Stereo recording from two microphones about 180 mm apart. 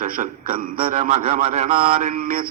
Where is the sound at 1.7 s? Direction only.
30° right (ahead or behind).